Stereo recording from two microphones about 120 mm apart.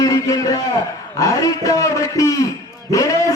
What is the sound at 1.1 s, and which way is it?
A man's voice, 30° left (ahead or behind).